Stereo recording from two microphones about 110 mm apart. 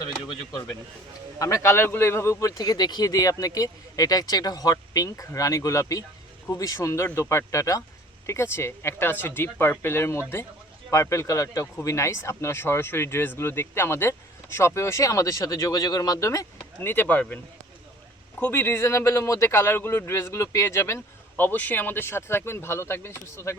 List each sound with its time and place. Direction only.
0.0 s a sound: 35° left (ahead or behind)
1.4 s a man's voice: 30° left (ahead or behind)
16.9 s speech: 15° left (ahead or behind)